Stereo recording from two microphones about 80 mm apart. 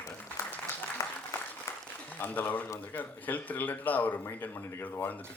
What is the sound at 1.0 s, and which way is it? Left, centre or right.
Applause, left.